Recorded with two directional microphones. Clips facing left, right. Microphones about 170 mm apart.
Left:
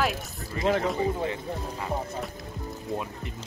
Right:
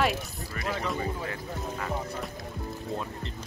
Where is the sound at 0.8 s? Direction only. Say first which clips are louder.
Left 5 dB; 20° left (ahead or behind).